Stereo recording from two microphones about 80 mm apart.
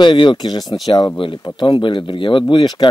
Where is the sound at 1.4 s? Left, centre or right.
Left.